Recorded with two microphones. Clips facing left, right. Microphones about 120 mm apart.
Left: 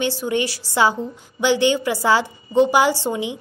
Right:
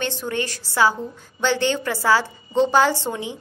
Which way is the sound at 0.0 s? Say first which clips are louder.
Left 4 dB; 10° left (ahead or behind).